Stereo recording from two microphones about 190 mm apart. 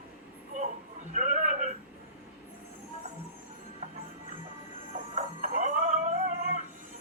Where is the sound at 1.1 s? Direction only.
40° right (ahead or behind).